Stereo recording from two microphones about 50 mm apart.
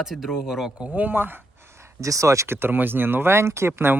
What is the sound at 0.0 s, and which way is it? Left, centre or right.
Speech, centre.